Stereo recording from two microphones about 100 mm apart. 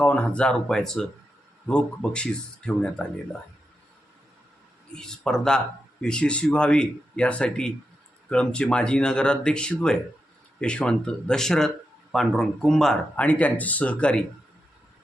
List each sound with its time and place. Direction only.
0.0 s speech: 10° left (ahead or behind)
4.9 s speech: 5° left (ahead or behind)
13.2 s speech: 15° left (ahead or behind)